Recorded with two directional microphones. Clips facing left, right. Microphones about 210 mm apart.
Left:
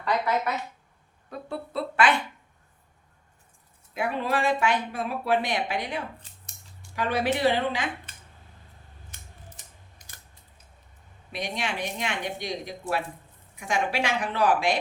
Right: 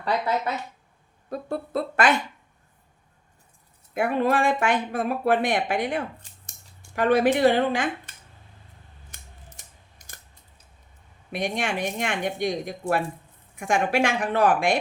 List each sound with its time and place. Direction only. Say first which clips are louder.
1.3 s a sound: right 6 dB; 45° right (ahead or behind)
3.9 s speech: right 5 dB; 50° right (ahead or behind)
11.3 s speech: right 5 dB; 50° right (ahead or behind)